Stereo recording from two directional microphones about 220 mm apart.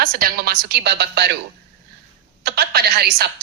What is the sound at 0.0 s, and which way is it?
A woman's voice, 40° right (ahead or behind).